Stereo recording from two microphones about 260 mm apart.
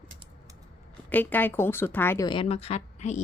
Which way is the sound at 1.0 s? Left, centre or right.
Centre.